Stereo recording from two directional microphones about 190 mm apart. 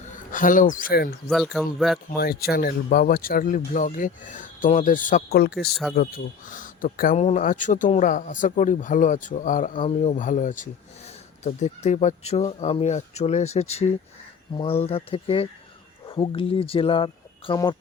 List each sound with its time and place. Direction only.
0.3 s speech: 45° left (ahead or behind)
1.3 s speech: centre (ahead or behind)
2.1 s speech: 55° left (ahead or behind)
5.4 s speech: 60° left (ahead or behind)
6.0 s speech: 45° left (ahead or behind); by 17.7 s 25° left (ahead or behind)